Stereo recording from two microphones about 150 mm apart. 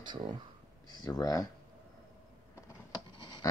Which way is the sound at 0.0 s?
30° right (ahead or behind).